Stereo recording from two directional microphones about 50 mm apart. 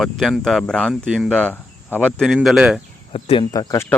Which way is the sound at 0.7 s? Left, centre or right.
Centre.